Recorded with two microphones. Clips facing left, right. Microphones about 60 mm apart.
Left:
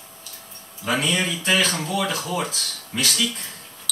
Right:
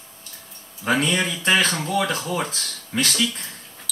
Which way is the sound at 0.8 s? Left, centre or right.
Right.